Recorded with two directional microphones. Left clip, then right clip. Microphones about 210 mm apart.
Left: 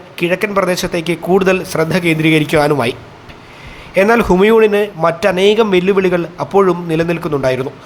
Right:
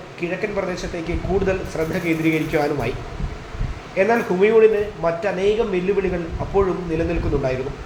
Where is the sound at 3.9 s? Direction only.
35° left (ahead or behind).